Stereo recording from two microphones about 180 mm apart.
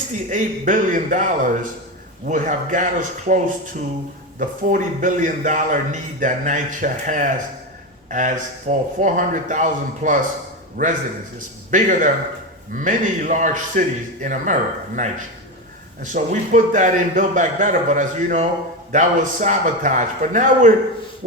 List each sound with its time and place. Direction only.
0.3 s a man's voice: 45° right (ahead or behind)